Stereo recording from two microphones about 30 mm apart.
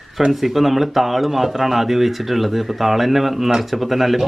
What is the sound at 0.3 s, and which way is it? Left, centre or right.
Speech, centre.